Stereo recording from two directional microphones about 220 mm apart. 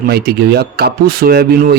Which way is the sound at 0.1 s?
45° right (ahead or behind).